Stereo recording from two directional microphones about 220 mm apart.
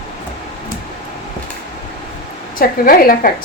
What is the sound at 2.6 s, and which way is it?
Speech, 40° left (ahead or behind).